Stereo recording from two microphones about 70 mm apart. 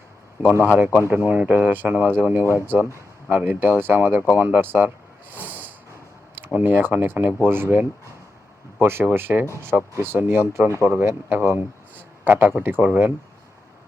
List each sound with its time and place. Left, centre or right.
1.0 s speech: right
2.4 s speech: right
3.2 s speech: right
5.5 s a sound: right
6.3 s a man's voice: right